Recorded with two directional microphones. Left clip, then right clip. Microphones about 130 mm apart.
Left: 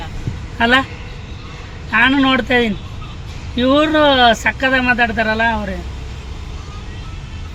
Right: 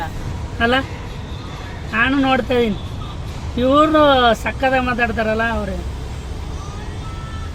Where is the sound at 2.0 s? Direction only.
10° right (ahead or behind).